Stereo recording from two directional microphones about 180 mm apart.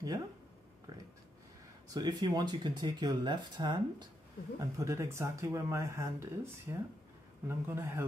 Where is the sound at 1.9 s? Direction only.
20° right (ahead or behind).